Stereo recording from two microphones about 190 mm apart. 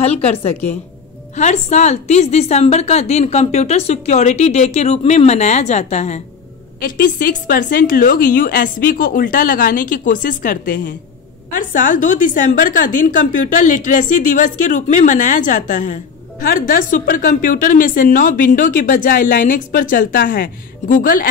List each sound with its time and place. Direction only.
0.0 s a woman's voice: 30° left (ahead or behind)
6.8 s a woman's voice: 50° left (ahead or behind)